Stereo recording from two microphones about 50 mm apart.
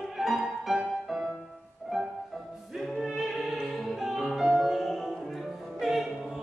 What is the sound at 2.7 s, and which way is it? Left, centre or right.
Opera, centre.